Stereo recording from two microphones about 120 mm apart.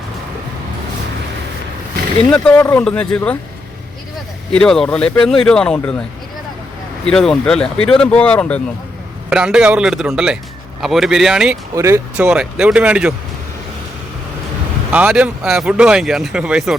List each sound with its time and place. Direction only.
2.3 s speech: 10° left (ahead or behind)
4.5 s speech: 5° left (ahead or behind)
7.0 s speech: 5° left (ahead or behind)
9.3 s speech: 5° right (ahead or behind)
11.7 s speech: 25° right (ahead or behind)
12.1 s speech: 10° right (ahead or behind)
14.9 s speech: 10° right (ahead or behind)